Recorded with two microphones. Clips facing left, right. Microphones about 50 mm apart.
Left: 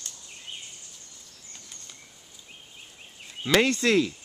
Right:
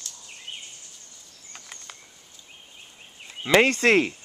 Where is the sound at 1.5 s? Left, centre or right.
Right.